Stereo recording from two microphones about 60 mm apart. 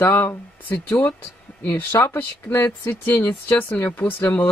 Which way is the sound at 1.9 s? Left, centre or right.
Left.